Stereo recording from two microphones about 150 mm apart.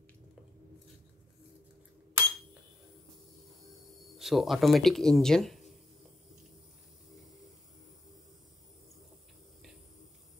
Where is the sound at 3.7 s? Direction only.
Centre (ahead or behind).